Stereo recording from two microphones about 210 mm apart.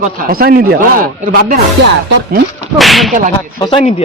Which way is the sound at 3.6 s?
20° left (ahead or behind).